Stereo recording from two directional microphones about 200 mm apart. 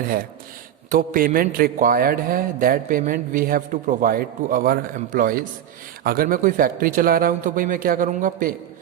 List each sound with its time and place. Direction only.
0.9 s a man's voice: 45° right (ahead or behind)